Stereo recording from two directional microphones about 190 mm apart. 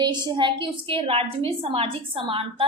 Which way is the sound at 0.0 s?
25° right (ahead or behind).